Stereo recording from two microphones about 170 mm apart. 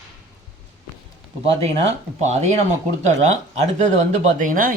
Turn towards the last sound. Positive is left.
turn(degrees=-55)  # may be behind; listen again after turning